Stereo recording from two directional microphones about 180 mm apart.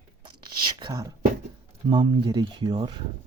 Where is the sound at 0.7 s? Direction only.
20° right (ahead or behind).